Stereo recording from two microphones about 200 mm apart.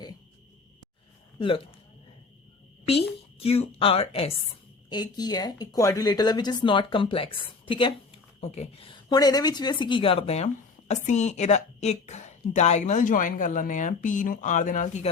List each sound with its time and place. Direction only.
1.4 s speech: 25° left (ahead or behind)
2.8 s a woman's voice: 30° left (ahead or behind)